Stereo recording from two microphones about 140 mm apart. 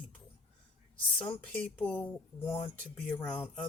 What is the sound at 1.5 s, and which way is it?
Speech, 10° left (ahead or behind).